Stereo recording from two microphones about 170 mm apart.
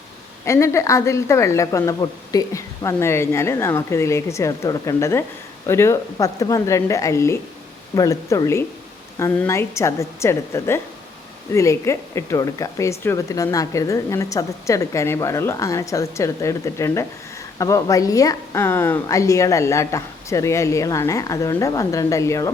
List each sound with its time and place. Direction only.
0.4 s a woman's voice: 15° left (ahead or behind)